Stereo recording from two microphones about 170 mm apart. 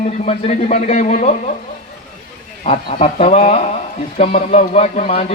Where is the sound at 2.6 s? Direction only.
40° left (ahead or behind).